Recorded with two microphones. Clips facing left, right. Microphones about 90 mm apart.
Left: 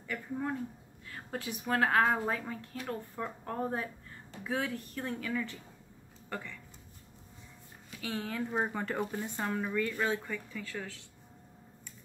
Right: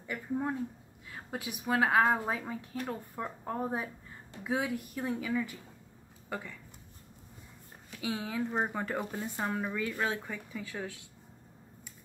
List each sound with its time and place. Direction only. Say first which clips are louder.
0.0 s speech: right 2 dB; 15° right (ahead or behind)
8.0 s speech: right 2 dB; 10° right (ahead or behind)